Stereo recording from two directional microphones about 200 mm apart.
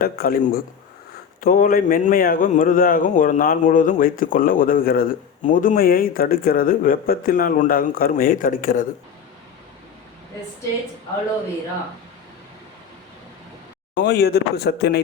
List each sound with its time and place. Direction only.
0.0 s speech: 45° left (ahead or behind)
13.9 s speech: 55° left (ahead or behind)